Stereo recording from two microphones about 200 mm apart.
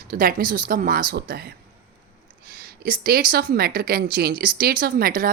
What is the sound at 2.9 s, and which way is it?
Speech, 50° right (ahead or behind).